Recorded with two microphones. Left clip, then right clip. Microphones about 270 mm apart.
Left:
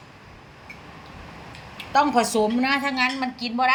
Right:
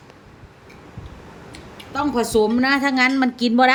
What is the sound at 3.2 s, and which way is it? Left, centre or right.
Speech, right.